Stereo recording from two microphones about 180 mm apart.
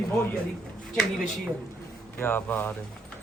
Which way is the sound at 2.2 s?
10° left (ahead or behind).